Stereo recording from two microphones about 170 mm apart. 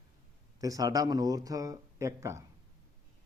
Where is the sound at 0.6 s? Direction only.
20° right (ahead or behind).